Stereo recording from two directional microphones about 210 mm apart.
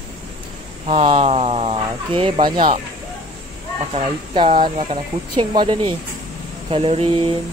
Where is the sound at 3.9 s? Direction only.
25° right (ahead or behind).